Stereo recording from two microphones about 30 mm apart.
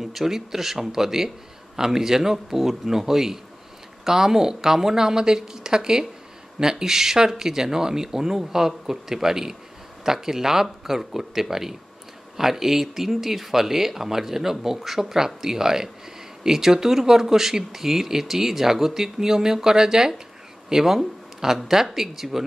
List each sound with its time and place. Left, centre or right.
0.0 s speech: centre